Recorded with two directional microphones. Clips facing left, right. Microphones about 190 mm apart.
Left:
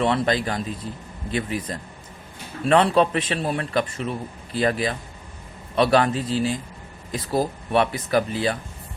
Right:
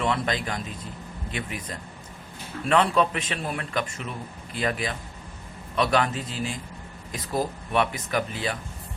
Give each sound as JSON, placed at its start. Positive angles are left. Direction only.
{"t": 0.0, "sound": "a man's voice", "side_deg": 35}
{"t": 2.6, "sound": "a man's voice", "side_deg": 35}